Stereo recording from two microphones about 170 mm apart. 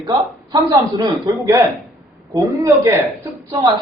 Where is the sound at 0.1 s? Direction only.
20° right (ahead or behind).